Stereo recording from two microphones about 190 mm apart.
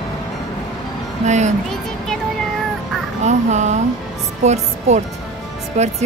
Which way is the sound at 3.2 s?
35° right (ahead or behind).